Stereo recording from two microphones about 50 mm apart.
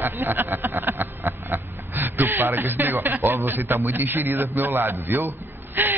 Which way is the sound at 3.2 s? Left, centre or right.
Right.